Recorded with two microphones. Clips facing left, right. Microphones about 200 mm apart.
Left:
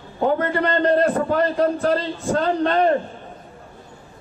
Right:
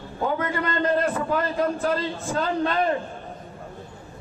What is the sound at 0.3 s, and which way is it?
A man's voice, 35° left (ahead or behind).